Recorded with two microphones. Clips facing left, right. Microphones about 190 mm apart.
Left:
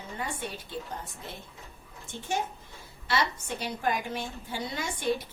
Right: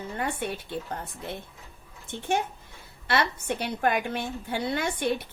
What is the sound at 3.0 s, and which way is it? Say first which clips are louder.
Speech: right 3 dB; 60° right (ahead or behind).